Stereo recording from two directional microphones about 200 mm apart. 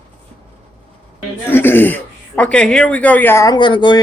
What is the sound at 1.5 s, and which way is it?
A man's voice, 10° left (ahead or behind).